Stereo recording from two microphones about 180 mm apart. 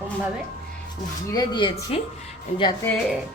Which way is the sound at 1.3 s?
25° left (ahead or behind).